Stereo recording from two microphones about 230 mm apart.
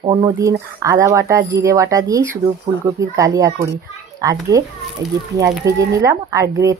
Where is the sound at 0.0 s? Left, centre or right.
Centre.